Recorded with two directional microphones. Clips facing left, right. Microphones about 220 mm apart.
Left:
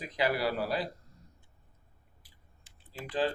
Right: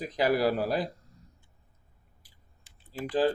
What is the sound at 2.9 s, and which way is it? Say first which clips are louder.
Speech: right 5 dB; 40° right (ahead or behind).